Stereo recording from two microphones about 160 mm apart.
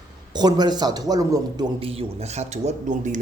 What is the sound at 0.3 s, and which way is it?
Speech, 25° right (ahead or behind).